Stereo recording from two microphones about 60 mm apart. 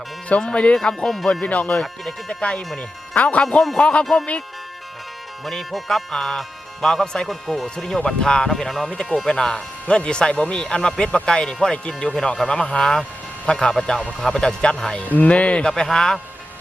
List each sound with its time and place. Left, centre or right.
0.3 s speech: centre
1.3 s speech: left
3.4 s speech: centre
5.5 s speech: centre
7.3 s speech: centre
7.9 s speech: centre